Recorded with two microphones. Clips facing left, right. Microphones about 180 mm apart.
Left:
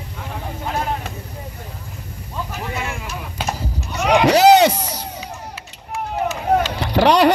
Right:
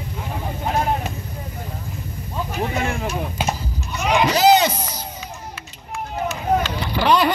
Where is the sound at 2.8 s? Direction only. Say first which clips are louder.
Right 5 dB; 35° right (ahead or behind).